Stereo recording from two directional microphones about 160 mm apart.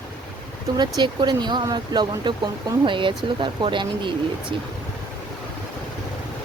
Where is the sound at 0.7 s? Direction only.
30° right (ahead or behind).